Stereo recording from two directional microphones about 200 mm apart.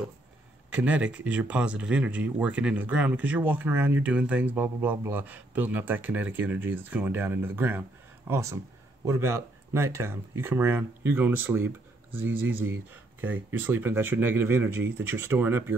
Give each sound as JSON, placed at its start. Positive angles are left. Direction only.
{"t": 0.7, "sound": "speech", "side_deg": -5}